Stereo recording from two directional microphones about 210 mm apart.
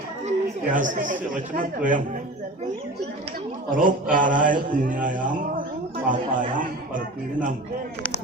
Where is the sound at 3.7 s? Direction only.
40° right (ahead or behind).